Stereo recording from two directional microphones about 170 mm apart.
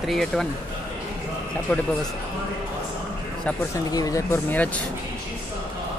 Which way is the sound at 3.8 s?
20° left (ahead or behind).